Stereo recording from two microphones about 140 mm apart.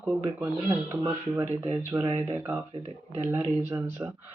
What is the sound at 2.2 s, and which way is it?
Speech, 15° right (ahead or behind).